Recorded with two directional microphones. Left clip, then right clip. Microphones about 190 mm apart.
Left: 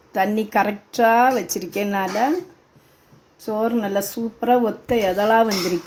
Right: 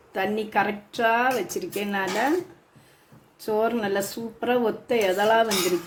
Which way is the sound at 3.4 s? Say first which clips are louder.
Left 2 dB; 25° left (ahead or behind).